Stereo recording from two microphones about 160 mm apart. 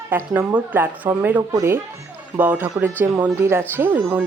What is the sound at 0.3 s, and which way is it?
Speech, 10° right (ahead or behind).